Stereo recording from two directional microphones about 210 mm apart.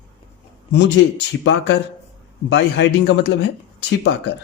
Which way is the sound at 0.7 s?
55° left (ahead or behind).